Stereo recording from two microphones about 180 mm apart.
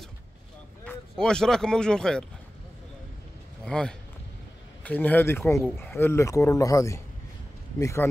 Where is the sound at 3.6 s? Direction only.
5° left (ahead or behind).